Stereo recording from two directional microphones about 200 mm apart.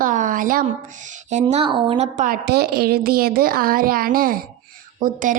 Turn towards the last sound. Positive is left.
turn(degrees=-40)  # may be behind; listen again after turning